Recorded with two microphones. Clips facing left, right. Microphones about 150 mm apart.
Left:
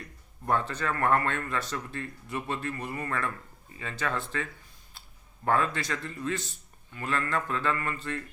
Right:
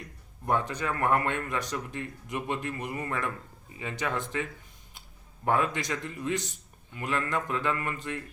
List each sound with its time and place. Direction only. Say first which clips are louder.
0.4 s speech: even; 15° right (ahead or behind)
5.5 s speech: even; 15° right (ahead or behind)